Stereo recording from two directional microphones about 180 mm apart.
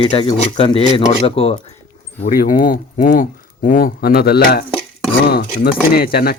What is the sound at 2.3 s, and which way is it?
Speech, 50° left (ahead or behind).